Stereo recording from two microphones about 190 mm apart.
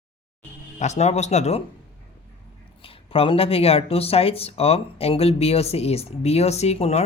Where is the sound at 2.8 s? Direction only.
30° left (ahead or behind).